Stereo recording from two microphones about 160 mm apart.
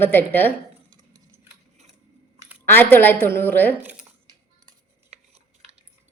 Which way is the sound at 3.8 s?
5° right (ahead or behind).